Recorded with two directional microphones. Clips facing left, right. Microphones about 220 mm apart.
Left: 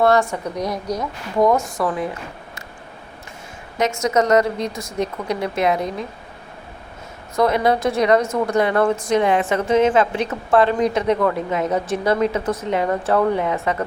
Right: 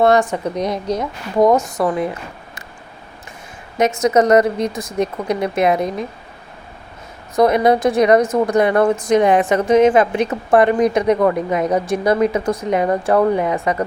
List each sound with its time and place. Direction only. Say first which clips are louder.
0.0 s a woman's voice: right 3 dB; 20° right (ahead or behind)
3.8 s a woman's voice: right 4 dB; 20° right (ahead or behind)
7.3 s a woman's voice: right 4 dB; 15° right (ahead or behind)